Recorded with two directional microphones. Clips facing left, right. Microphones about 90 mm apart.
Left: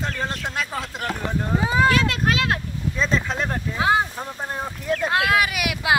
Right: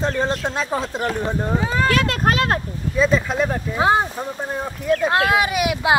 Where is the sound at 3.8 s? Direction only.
35° right (ahead or behind).